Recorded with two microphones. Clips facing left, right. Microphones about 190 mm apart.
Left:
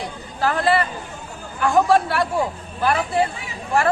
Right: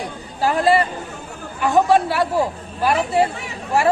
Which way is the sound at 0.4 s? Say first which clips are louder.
Right 3 dB; 15° right (ahead or behind).